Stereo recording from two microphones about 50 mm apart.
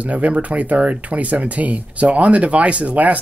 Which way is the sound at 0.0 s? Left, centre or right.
Right.